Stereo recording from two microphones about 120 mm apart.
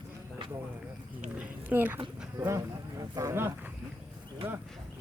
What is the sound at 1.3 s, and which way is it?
Speech, 15° right (ahead or behind).